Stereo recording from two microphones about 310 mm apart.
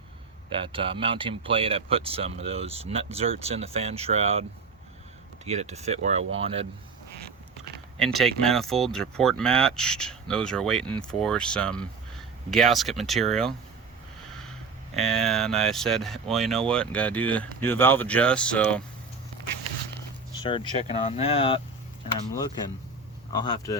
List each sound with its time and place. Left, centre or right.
0.5 s speech: centre
5.5 s speech: right
7.9 s speech: centre
14.3 s sniff: centre
14.9 s speech: centre
20.4 s speech: centre
23.3 s speech: centre